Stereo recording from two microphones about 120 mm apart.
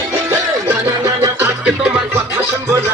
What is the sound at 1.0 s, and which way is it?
Music, 20° right (ahead or behind).